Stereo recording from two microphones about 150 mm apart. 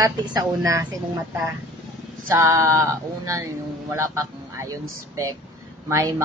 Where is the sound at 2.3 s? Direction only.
20° right (ahead or behind).